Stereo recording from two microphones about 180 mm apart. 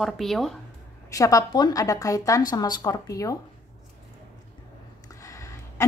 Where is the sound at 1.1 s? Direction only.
20° left (ahead or behind).